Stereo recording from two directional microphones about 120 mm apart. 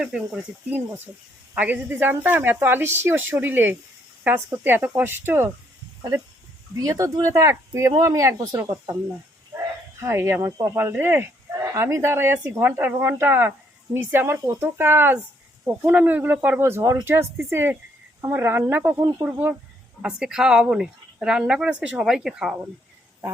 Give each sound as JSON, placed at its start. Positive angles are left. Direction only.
{"t": 0.0, "sound": "speech", "side_deg": -10}
{"t": 6.7, "sound": "speech", "side_deg": -30}
{"t": 20.0, "sound": "speech", "side_deg": -5}